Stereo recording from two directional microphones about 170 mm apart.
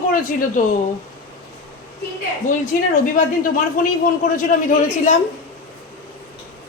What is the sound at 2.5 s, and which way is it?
Speech, 50° left (ahead or behind).